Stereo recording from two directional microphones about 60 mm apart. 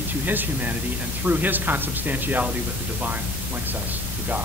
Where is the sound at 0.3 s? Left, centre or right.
Right.